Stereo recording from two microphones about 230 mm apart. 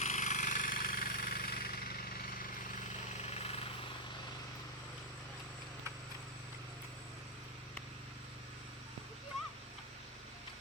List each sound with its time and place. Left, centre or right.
0.0 s jackhammer: left
3.2 s jackhammer: left